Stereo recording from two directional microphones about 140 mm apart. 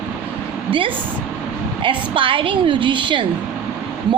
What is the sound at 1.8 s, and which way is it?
A woman's voice, 40° right (ahead or behind).